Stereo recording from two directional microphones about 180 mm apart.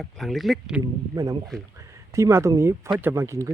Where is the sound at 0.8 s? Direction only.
20° right (ahead or behind).